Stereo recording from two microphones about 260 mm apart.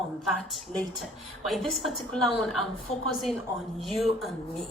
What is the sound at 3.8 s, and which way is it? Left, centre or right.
Speech, centre.